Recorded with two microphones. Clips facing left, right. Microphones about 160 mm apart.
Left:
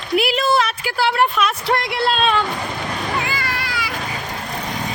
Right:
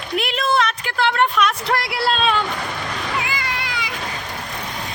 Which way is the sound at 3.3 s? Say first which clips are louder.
Left 1 dB; 20° right (ahead or behind).